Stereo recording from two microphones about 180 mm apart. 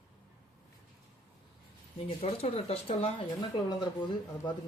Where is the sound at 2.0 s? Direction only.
35° left (ahead or behind).